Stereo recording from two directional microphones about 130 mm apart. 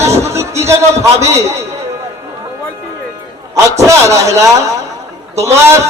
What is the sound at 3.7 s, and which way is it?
A man's voice, 25° right (ahead or behind).